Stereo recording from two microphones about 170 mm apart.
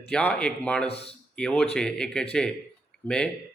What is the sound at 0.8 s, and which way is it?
Speech, 35° left (ahead or behind).